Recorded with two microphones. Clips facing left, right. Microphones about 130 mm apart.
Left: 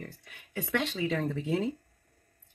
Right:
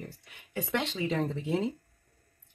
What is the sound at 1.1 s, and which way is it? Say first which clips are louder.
Speech: even; 25° right (ahead or behind).